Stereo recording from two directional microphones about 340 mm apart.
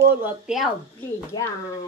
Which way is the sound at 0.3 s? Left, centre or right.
Centre.